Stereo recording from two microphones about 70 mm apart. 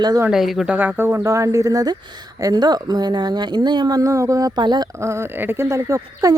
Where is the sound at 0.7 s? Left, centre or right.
Right.